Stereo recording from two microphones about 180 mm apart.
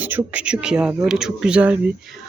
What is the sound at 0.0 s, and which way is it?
Speech, 10° right (ahead or behind).